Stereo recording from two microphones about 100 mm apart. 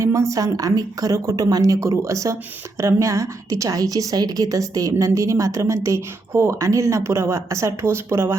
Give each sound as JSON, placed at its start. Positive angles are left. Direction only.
{"t": 0.0, "sound": "a woman's voice", "side_deg": -30}